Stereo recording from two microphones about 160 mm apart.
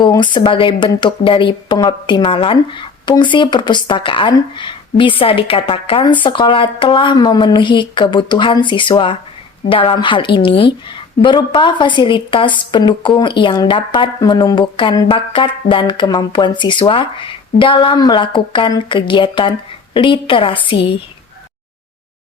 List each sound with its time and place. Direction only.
0.0 s a woman's voice: 30° left (ahead or behind)